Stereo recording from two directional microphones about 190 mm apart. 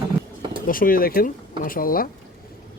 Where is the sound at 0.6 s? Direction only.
50° left (ahead or behind).